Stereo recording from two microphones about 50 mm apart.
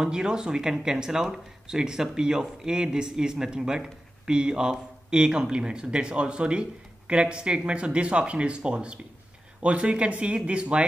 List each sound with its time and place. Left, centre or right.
0.0 s speech: centre